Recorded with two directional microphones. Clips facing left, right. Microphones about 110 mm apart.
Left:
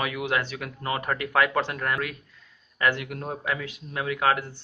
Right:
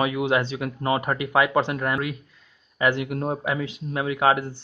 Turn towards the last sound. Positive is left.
turn(degrees=-20)  # may be behind; listen again after turning